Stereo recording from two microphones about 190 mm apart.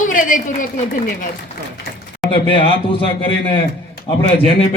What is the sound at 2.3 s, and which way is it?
Speech, 25° left (ahead or behind).